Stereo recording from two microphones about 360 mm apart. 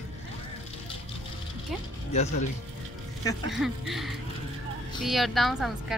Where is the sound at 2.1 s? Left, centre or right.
Centre.